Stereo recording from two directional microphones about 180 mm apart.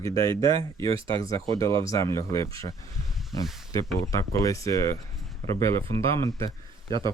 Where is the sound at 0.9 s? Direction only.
30° right (ahead or behind).